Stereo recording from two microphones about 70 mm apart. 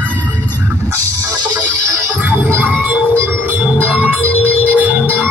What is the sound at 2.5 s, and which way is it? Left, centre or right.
Music, right.